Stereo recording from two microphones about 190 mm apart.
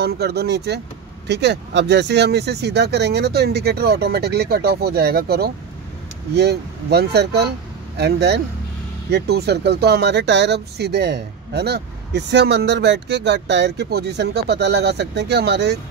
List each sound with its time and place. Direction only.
0.0 s speech: 55° right (ahead or behind)